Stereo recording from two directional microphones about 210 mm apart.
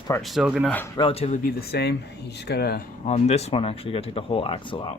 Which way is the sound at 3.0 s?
30° left (ahead or behind).